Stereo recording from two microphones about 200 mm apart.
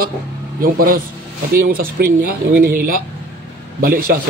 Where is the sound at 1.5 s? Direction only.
50° right (ahead or behind).